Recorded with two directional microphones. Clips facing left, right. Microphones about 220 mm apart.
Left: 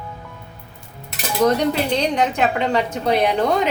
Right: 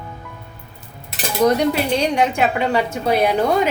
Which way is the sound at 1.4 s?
10° right (ahead or behind).